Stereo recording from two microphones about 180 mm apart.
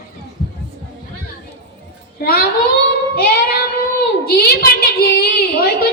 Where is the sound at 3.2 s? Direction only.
60° left (ahead or behind).